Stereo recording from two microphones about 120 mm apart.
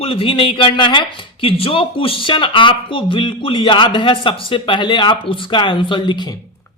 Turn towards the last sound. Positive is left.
turn(degrees=40)  # may be behind; listen again after turning